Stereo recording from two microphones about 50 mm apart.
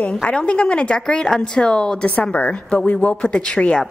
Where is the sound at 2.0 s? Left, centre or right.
Left.